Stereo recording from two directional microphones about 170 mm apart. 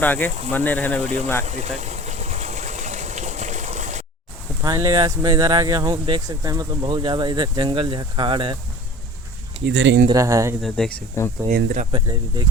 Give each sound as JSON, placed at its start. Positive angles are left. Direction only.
{"t": 0.0, "sound": "speech", "side_deg": 10}
{"t": 1.5, "sound": "a sound", "side_deg": -40}
{"t": 4.6, "sound": "speech", "side_deg": -20}
{"t": 9.6, "sound": "speech", "side_deg": -90}
{"t": 10.1, "sound": "speech", "side_deg": -20}
{"t": 10.6, "sound": "speech", "side_deg": 5}
{"t": 11.2, "sound": "speech", "side_deg": 15}
{"t": 11.5, "sound": "speech", "side_deg": -55}
{"t": 11.9, "sound": "speech", "side_deg": -30}